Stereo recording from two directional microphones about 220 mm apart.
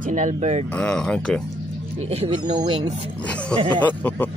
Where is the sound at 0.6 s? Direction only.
5° left (ahead or behind).